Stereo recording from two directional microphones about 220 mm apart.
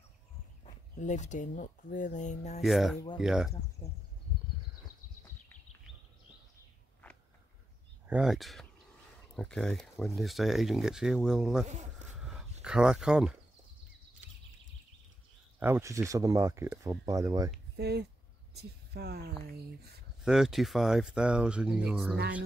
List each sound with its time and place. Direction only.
0.9 s speech: 35° left (ahead or behind)
2.6 s speech: centre (ahead or behind)
8.1 s speech: 5° right (ahead or behind)
11.6 s a sound: 30° right (ahead or behind)
12.2 s a sound: centre (ahead or behind)
12.6 s speech: 5° right (ahead or behind)
15.6 s speech: 10° right (ahead or behind)
17.7 s speech: 50° right (ahead or behind)
19.4 s a sound: 45° right (ahead or behind)
20.2 s speech: centre (ahead or behind)